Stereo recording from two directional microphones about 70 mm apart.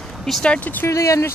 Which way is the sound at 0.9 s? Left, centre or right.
Left.